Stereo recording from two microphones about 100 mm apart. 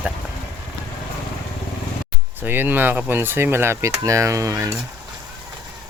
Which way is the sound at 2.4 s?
20° right (ahead or behind).